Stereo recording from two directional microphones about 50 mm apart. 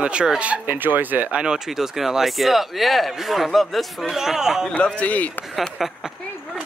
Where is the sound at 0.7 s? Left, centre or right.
Right.